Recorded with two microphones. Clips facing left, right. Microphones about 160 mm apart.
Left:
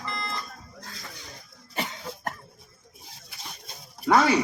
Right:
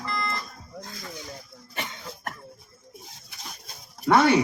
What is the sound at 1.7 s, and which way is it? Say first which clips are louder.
Cough: left 3 dB; 30° left (ahead or behind).